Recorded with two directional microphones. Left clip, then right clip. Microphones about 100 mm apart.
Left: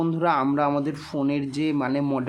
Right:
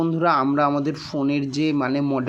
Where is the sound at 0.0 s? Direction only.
15° right (ahead or behind).